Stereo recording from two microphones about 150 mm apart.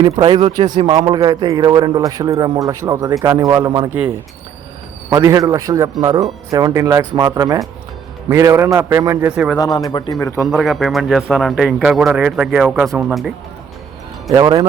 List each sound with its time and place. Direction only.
0.3 s a man's voice: 35° right (ahead or behind)
3.8 s speech: 10° right (ahead or behind)
5.1 s a man's voice: 25° right (ahead or behind)
9.6 s a man's voice: 25° left (ahead or behind)
10.4 s speech: centre (ahead or behind)
14.3 s a man's voice: 25° right (ahead or behind)